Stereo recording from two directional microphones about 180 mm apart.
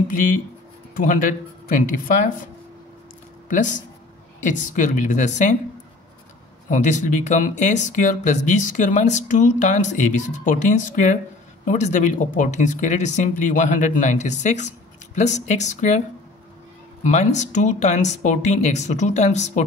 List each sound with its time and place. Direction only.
0.9 s speech: 50° left (ahead or behind)
3.4 s speech: 45° left (ahead or behind)
6.7 s speech: 45° left (ahead or behind)
17.0 s speech: 40° left (ahead or behind)